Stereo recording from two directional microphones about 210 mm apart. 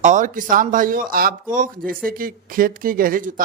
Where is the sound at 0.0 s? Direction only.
35° right (ahead or behind).